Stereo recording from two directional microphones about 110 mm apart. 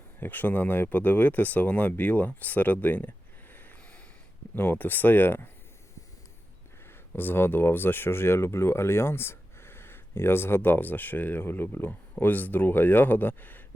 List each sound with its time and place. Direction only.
0.2 s speech: 15° left (ahead or behind)
7.1 s speech: 20° left (ahead or behind)